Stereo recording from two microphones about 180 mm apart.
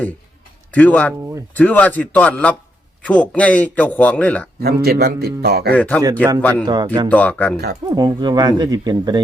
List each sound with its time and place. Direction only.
0.7 s a man's voice: 10° left (ahead or behind)
4.6 s a man's voice: 60° right (ahead or behind)
5.7 s a man's voice: 10° left (ahead or behind)
6.7 s speech: 25° right (ahead or behind)
7.1 s a man's voice: 10° left (ahead or behind)
7.9 s speech: 20° right (ahead or behind)